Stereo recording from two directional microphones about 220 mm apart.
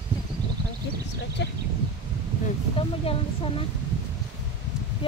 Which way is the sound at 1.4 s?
50° left (ahead or behind).